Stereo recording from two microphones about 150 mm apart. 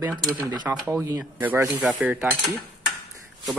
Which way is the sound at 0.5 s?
20° right (ahead or behind).